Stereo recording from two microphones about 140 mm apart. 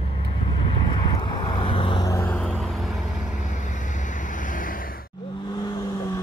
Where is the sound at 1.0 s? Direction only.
30° left (ahead or behind).